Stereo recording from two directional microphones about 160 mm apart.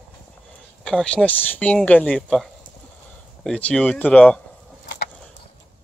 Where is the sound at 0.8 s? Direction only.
5° left (ahead or behind).